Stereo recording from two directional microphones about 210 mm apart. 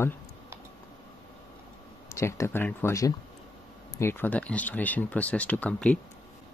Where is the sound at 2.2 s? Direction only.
15° left (ahead or behind).